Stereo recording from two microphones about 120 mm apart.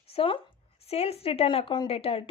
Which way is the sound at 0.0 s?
55° left (ahead or behind).